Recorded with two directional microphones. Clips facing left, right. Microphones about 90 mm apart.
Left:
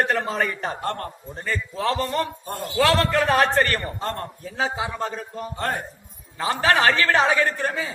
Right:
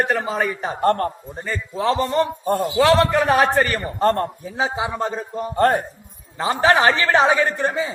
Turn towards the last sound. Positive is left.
turn(degrees=-20)  # may be behind; listen again after turning